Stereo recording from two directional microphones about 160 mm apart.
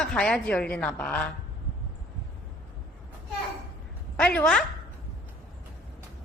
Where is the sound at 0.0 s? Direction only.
5° left (ahead or behind).